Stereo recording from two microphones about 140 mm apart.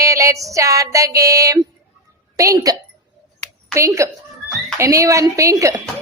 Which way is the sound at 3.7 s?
20° right (ahead or behind).